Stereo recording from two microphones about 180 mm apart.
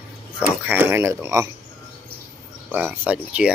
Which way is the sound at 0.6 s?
10° right (ahead or behind).